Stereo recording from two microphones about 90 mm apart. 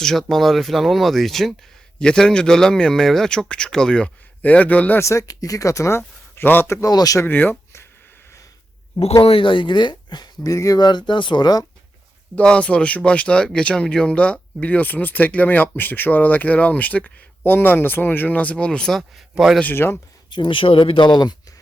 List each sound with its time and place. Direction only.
0.0 s speech: 5° left (ahead or behind)
4.9 s speech: 35° left (ahead or behind)
6.0 s speech: 20° left (ahead or behind)
6.8 s speech: 40° left (ahead or behind)
7.3 s speech: 20° left (ahead or behind)
9.2 s speech: 80° left; by 11.6 s 50° left (ahead or behind)
12.4 s speech: 10° left (ahead or behind)
19.7 s speech: 25° left (ahead or behind)
20.3 s speech: 65° left (ahead or behind)